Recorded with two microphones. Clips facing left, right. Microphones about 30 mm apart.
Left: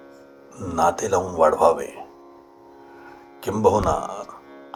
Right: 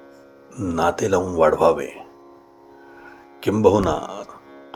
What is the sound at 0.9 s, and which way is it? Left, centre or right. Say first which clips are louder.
A man's voice: right 2 dB; right.